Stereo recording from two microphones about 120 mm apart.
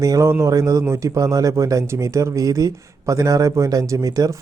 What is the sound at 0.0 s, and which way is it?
Speech, 25° right (ahead or behind).